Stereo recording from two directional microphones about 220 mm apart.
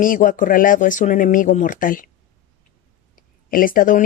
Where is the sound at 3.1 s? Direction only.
40° left (ahead or behind).